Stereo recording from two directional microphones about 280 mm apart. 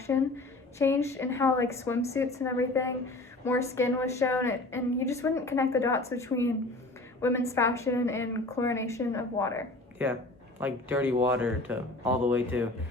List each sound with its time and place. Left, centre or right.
0.1 s a woman's voice: centre
10.6 s speech: centre